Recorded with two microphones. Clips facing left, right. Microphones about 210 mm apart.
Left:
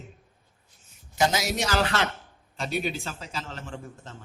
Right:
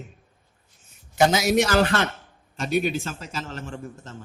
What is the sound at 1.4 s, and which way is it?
A man's voice, 55° right (ahead or behind).